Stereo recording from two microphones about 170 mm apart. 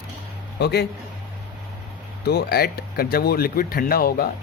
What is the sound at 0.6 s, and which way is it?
Speech, 75° left (ahead or behind).